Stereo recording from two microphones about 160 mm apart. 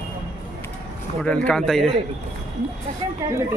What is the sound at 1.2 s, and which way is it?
Speech, 5° left (ahead or behind).